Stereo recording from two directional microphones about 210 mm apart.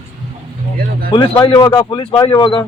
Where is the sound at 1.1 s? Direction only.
25° left (ahead or behind).